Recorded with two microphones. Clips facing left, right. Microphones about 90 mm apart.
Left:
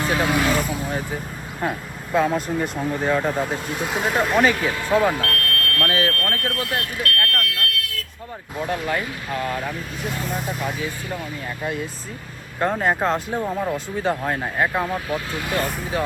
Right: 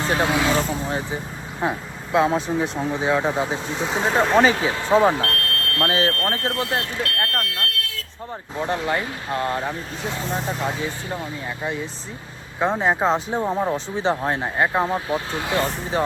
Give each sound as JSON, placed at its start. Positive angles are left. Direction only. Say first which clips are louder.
{"t": 0.0, "sound": "speech", "louder": "even", "side_deg": -30}
{"t": 2.2, "sound": "speech", "louder": "right 1 dB", "side_deg": -25}
{"t": 2.9, "sound": "speech", "louder": "even", "side_deg": 0}
{"t": 3.5, "sound": "speech", "louder": "right 1 dB", "side_deg": -25}